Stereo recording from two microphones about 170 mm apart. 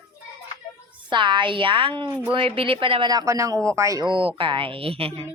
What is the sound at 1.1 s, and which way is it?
A woman's voice, 30° right (ahead or behind).